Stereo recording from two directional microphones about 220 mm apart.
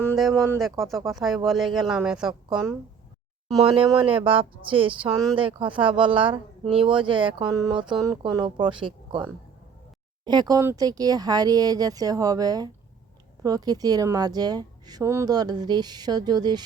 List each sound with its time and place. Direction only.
0.6 s a woman's voice: centre (ahead or behind)
3.6 s speech: 25° right (ahead or behind)
10.2 s speech: 20° right (ahead or behind)